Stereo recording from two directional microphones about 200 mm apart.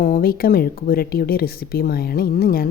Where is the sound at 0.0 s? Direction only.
45° left (ahead or behind).